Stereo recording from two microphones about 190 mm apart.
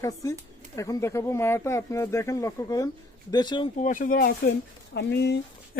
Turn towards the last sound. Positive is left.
turn(degrees=60)  # may be behind; listen again after turning